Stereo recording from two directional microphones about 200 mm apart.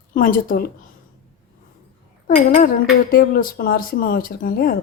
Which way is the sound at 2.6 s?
45° left (ahead or behind).